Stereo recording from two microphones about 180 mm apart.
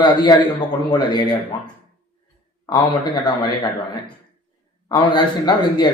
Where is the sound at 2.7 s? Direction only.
25° left (ahead or behind).